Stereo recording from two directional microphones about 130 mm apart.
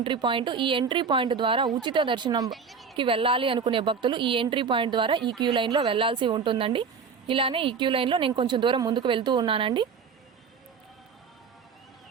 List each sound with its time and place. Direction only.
0.0 s a woman's voice: 40° right (ahead or behind)
2.5 s a woman's voice: centre (ahead or behind)
3.0 s a woman's voice: 45° right (ahead or behind)